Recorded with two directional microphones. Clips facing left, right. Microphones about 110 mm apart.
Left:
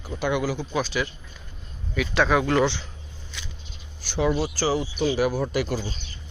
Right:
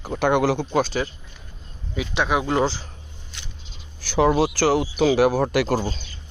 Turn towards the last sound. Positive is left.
turn(degrees=-70)  # may be behind; listen again after turning